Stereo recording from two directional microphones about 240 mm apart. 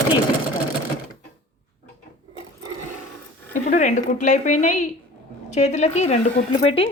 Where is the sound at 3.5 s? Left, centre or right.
Left.